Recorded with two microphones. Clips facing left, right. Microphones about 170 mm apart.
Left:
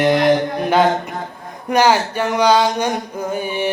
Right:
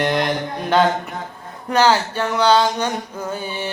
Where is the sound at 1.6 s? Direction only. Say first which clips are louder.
Left 2 dB; 15° left (ahead or behind).